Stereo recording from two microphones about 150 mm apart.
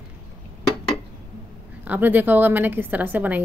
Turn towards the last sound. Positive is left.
turn(degrees=-10)  # may be behind; listen again after turning